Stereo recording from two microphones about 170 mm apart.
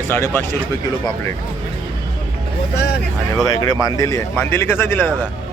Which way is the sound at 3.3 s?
20° left (ahead or behind).